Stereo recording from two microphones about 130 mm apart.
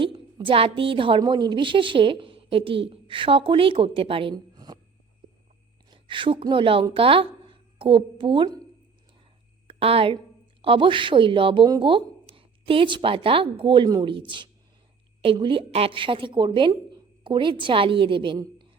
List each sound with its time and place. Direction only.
0.0 s a woman's voice: 40° right (ahead or behind)
5.9 s a woman's voice: 40° right (ahead or behind)
9.6 s a woman's voice: 45° right (ahead or behind)